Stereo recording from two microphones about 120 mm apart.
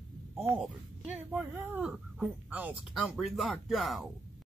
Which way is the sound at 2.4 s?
10° right (ahead or behind).